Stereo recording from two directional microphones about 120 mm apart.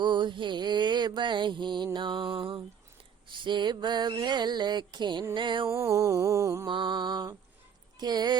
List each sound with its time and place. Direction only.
0.0 s mantra: 40° right (ahead or behind)
5.6 s a sound: 25° right (ahead or behind)
6.7 s mantra: 40° right (ahead or behind)